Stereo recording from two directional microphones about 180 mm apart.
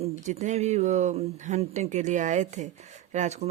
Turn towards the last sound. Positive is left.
turn(degrees=-40)  # may be behind; listen again after turning